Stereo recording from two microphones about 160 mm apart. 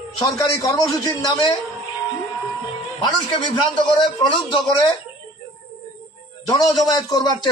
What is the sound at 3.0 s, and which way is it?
Speech, 30° left (ahead or behind).